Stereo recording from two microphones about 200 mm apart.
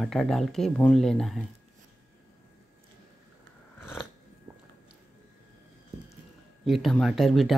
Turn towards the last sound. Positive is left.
turn(degrees=0)  # may be behind; listen again after turning